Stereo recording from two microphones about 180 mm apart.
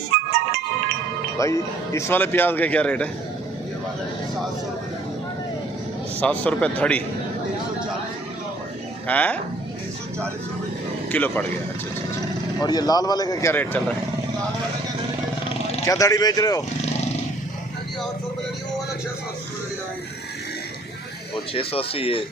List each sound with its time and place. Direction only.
1.4 s a man's voice: 15° left (ahead or behind)
6.1 s a man's voice: 5° left (ahead or behind)
9.0 s a man's voice: 10° left (ahead or behind)
11.1 s a man's voice: 10° left (ahead or behind)
12.5 s speech: 20° left (ahead or behind)
15.9 s speech: 20° left (ahead or behind)
21.5 s speech: 30° left (ahead or behind)